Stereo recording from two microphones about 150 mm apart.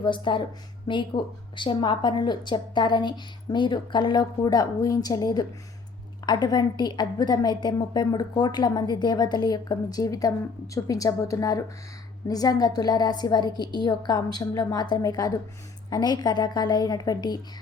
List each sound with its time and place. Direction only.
0.0 s a woman's voice: 30° left (ahead or behind)